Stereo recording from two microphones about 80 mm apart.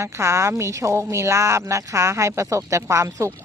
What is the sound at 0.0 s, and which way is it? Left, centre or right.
Speech, right.